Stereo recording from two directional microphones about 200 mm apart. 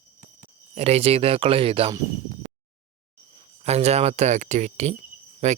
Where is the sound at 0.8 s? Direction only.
30° right (ahead or behind).